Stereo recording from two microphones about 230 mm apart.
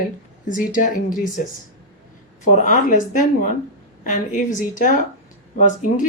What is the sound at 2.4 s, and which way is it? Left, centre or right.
Speech, left.